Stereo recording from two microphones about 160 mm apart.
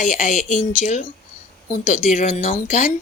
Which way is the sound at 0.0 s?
50° left (ahead or behind).